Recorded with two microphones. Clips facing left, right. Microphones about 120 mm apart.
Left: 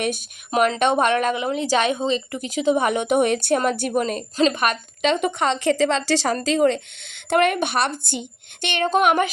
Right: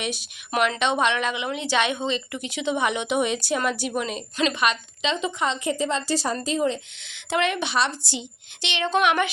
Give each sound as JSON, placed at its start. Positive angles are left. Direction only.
{"t": 0.5, "sound": "a woman's voice", "side_deg": 40}